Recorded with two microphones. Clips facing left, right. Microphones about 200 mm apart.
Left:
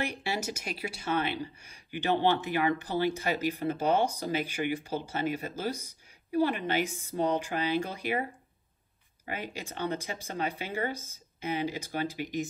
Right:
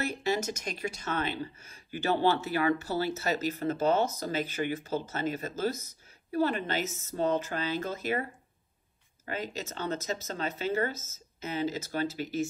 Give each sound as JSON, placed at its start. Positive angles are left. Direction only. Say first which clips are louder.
{"t": 0.0, "sound": "speech", "louder": "right 3 dB", "side_deg": 10}
{"t": 9.3, "sound": "speech", "louder": "right 2 dB", "side_deg": 10}